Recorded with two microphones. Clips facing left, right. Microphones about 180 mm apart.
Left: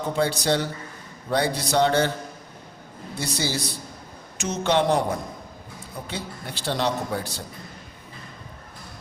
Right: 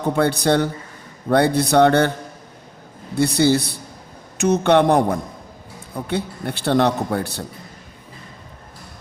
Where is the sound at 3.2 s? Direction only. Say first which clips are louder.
Right 12 dB; 60° right (ahead or behind).